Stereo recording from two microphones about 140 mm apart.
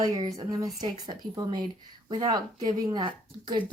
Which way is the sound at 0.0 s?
25° right (ahead or behind).